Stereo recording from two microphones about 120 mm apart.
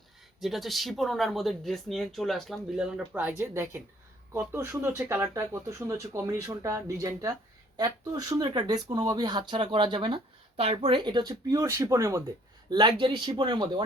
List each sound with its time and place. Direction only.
0.3 s speech: centre (ahead or behind)
3.1 s speech: 15° right (ahead or behind)
3.5 s speech: 25° right (ahead or behind); by 10.2 s 40° right (ahead or behind)
10.6 s speech: 60° right (ahead or behind)
10.9 s speech: 40° right (ahead or behind)
12.7 s speech: 45° right (ahead or behind)